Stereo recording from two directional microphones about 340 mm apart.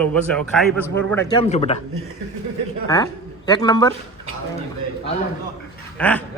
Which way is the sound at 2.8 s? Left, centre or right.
Centre.